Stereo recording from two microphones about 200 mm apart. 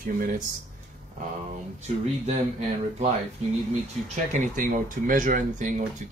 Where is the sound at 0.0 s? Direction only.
45° right (ahead or behind).